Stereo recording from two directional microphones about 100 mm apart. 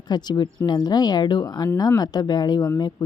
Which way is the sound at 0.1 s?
45° left (ahead or behind).